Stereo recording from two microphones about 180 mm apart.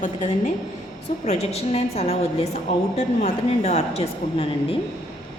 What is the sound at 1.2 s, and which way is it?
A woman's voice, 35° left (ahead or behind).